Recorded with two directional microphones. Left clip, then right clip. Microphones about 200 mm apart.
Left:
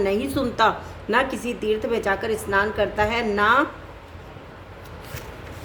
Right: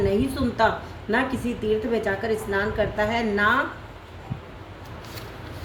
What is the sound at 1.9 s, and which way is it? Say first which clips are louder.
A woman's voice: left 1 dB; 45° left (ahead or behind).